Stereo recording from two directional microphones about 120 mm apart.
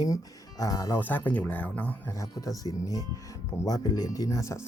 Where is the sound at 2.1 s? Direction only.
30° left (ahead or behind).